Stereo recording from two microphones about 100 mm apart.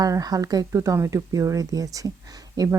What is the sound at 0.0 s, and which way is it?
Speech, 40° right (ahead or behind).